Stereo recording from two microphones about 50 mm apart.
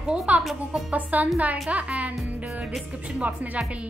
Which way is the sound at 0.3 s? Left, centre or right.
Right.